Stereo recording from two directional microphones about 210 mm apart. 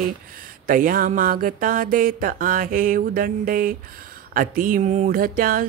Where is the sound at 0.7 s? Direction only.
40° right (ahead or behind).